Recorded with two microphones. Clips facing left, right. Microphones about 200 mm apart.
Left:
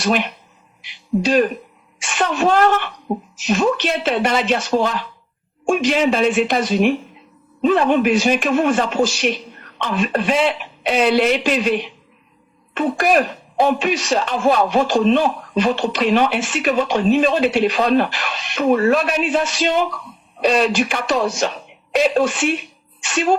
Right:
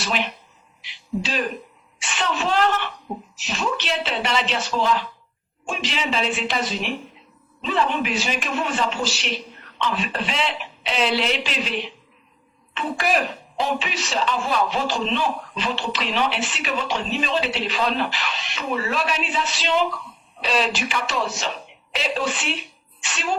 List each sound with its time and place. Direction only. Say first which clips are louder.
0.0 s a man's voice: left 7 dB; 50° left (ahead or behind)